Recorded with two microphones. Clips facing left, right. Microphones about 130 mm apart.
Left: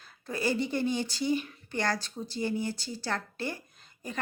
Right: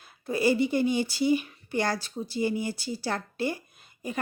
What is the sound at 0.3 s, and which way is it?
Speech, 10° right (ahead or behind).